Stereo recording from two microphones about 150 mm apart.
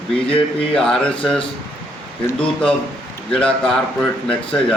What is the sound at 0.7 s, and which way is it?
Speech, 5° left (ahead or behind).